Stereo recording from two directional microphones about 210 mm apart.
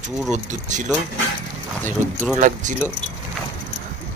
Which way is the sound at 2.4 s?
35° right (ahead or behind).